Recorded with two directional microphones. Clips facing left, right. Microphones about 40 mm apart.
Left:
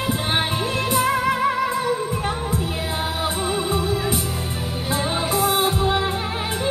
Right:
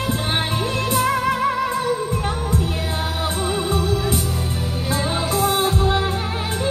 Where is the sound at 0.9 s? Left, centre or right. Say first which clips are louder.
Even; centre.